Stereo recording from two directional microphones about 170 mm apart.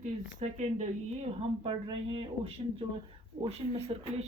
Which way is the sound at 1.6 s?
30° right (ahead or behind).